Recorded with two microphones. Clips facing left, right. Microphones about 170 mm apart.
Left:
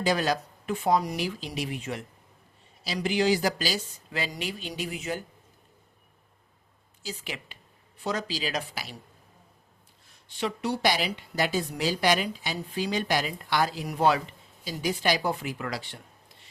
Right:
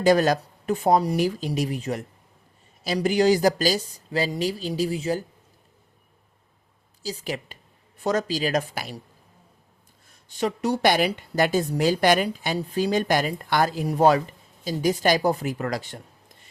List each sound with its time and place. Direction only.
0.0 s speech: 45° right (ahead or behind)
0.9 s speech: 30° right (ahead or behind)
1.1 s speech: 45° right (ahead or behind)
7.0 s speech: 35° right (ahead or behind)
10.2 s speech: 45° right (ahead or behind)